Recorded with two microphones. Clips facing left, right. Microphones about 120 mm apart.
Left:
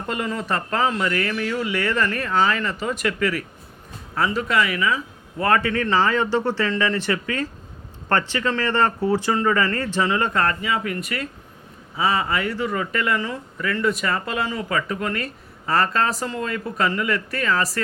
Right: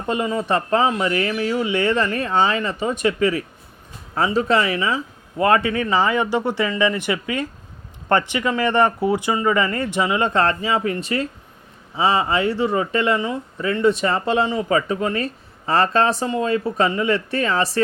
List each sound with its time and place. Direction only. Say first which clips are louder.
0.1 s speech: right 5 dB; 20° right (ahead or behind)